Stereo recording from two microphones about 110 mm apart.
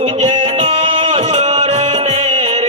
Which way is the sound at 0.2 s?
90° right.